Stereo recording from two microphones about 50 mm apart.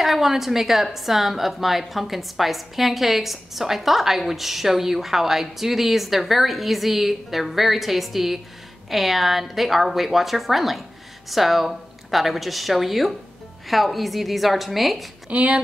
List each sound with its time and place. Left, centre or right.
0.0 s a woman's voice: centre
15.3 s speech: right